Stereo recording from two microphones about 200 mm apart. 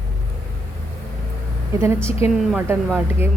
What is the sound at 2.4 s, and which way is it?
Speech, 10° right (ahead or behind).